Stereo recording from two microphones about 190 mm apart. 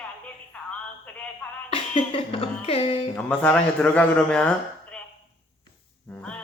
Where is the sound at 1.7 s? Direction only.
30° left (ahead or behind).